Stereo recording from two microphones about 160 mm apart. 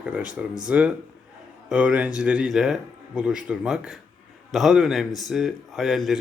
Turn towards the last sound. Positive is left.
turn(degrees=0)  # may be behind; listen again after turning